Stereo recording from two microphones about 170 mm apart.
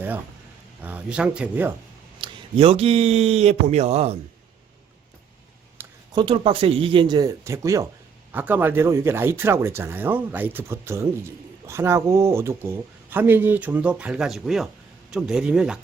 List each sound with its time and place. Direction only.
0.8 s speech: 10° right (ahead or behind)
2.1 s speech: 30° right (ahead or behind)
5.8 s a sound: 10° right (ahead or behind)
6.1 s speech: 30° right (ahead or behind); by 15.8 s 5° right (ahead or behind)